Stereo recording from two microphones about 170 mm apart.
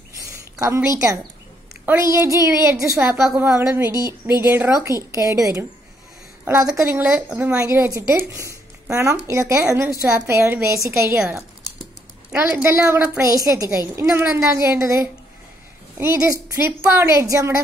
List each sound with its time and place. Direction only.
0.6 s a woman's voice: 20° right (ahead or behind)
3.0 s a woman's voice: 5° right (ahead or behind)
3.4 s a woman's voice: 15° right (ahead or behind)
12.3 s a woman's voice: 5° right (ahead or behind)